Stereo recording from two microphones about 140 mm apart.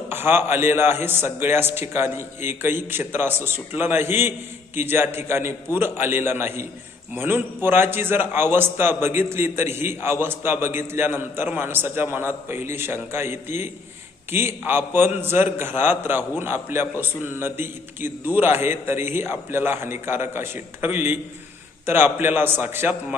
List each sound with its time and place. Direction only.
0.1 s a man's voice: 15° right (ahead or behind)